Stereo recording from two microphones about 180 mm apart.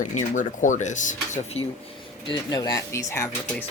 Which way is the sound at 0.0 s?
45° left (ahead or behind).